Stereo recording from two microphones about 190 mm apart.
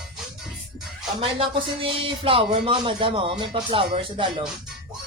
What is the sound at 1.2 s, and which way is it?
Speech, 30° right (ahead or behind).